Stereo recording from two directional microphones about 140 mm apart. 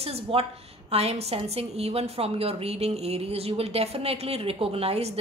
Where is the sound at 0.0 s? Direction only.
45° right (ahead or behind).